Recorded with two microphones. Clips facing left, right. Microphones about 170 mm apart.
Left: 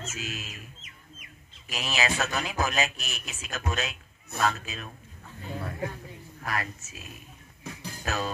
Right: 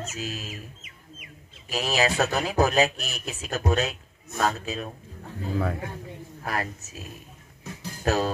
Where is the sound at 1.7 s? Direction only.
35° right (ahead or behind).